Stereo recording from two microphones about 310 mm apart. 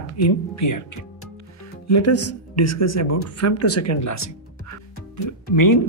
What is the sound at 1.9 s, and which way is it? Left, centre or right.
Speech, left.